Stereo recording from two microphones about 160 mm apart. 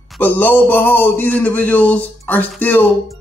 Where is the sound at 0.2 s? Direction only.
10° left (ahead or behind).